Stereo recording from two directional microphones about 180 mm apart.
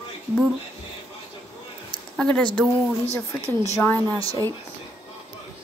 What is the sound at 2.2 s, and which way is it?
Speech, 5° left (ahead or behind).